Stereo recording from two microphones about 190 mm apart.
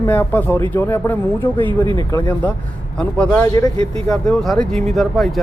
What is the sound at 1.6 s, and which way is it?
Speech, 25° right (ahead or behind).